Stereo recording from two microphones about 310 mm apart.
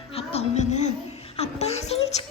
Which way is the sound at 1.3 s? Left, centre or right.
Centre.